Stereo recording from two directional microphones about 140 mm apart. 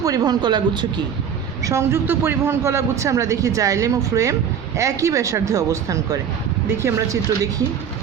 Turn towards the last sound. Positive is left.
turn(degrees=-20)  # may be behind; listen again after turning